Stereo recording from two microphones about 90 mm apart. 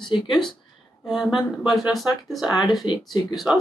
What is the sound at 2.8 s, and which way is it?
Speech, 60° left (ahead or behind).